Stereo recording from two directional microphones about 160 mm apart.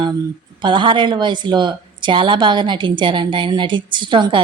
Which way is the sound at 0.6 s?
30° right (ahead or behind).